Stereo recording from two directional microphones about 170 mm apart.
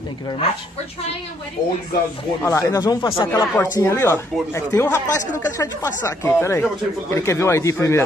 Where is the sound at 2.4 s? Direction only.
20° left (ahead or behind).